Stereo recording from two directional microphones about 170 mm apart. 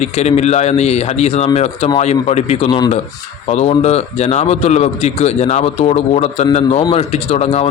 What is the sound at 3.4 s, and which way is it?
A man's voice, 40° left (ahead or behind).